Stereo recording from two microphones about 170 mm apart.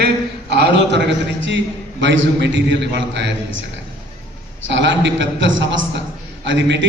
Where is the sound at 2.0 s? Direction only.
90° right.